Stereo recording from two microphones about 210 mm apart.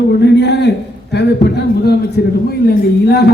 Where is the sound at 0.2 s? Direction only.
55° left (ahead or behind).